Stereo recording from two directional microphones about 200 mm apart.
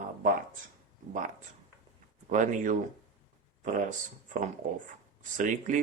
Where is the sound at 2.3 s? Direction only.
40° right (ahead or behind).